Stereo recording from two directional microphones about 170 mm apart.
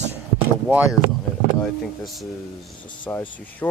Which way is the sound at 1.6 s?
Centre (ahead or behind).